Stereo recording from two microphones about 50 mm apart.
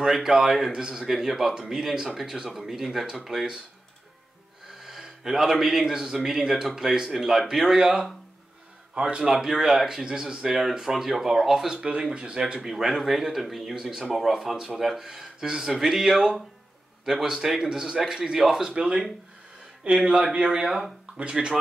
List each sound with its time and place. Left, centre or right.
0.0 s a man's voice: centre
4.6 s a man's voice: centre
8.9 s a man's voice: centre
18.7 s speech: right
20.4 s a man's voice: centre
21.2 s speech: centre